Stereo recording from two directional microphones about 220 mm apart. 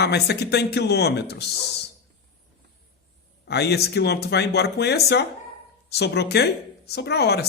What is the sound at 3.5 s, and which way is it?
Speech, 50° left (ahead or behind).